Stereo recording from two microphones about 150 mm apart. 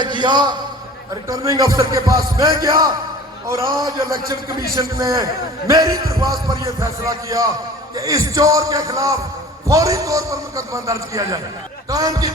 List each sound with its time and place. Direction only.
0.0 s a man's voice: 30° right (ahead or behind)